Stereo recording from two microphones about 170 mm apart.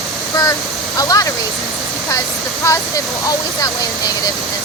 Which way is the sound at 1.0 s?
20° left (ahead or behind).